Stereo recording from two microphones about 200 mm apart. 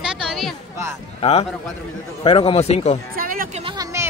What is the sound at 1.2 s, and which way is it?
Speech, 30° left (ahead or behind).